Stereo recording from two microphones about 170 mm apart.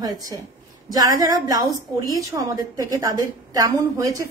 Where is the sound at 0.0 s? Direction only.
20° right (ahead or behind).